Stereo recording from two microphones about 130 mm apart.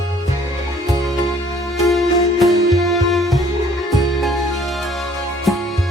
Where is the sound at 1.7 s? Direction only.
Centre (ahead or behind).